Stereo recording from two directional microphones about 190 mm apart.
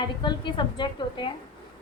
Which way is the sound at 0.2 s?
25° left (ahead or behind).